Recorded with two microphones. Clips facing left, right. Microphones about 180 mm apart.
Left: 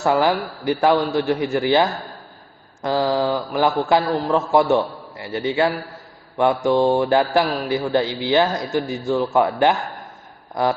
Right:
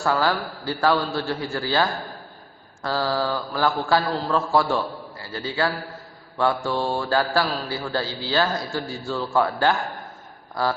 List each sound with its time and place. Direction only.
0.0 s a man's voice: 20° left (ahead or behind)